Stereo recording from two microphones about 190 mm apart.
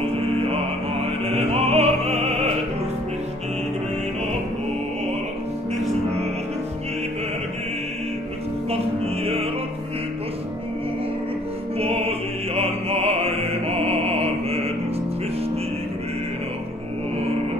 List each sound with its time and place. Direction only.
1.2 s music: 30° right (ahead or behind)
8.6 s music: 30° right (ahead or behind)
12.5 s music: 30° right (ahead or behind)